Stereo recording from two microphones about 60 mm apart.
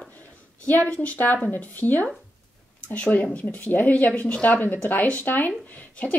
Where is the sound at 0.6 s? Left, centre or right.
Left.